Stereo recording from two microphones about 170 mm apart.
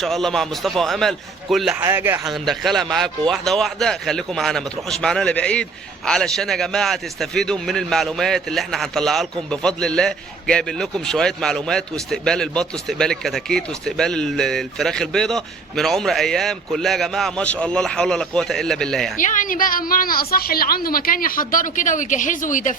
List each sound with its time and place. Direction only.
0.0 s a man's voice: centre (ahead or behind)
1.8 s speech: 15° right (ahead or behind)
2.2 s a man's voice: centre (ahead or behind)
19.1 s a woman's voice: 50° left (ahead or behind)